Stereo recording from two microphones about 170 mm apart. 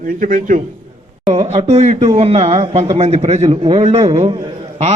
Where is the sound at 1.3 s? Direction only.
40° right (ahead or behind).